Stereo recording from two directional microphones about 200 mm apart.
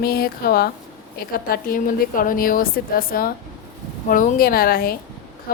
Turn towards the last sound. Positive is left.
turn(degrees=50)  # may be behind; listen again after turning